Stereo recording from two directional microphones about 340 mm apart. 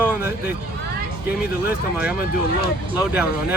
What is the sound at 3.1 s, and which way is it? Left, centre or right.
Speech, centre.